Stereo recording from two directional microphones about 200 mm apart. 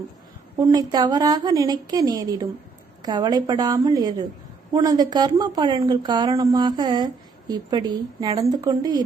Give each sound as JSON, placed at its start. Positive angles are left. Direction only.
{"t": 0.6, "sound": "a woman's voice", "side_deg": -20}